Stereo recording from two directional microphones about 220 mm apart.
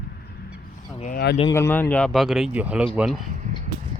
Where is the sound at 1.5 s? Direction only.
10° left (ahead or behind); by 2.8 s 5° right (ahead or behind).